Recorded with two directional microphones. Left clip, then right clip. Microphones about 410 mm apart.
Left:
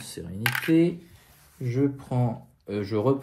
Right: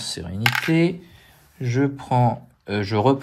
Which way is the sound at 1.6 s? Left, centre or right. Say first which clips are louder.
Right 4 dB; right.